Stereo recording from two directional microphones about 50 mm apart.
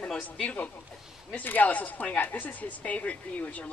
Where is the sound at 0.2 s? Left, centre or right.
Left.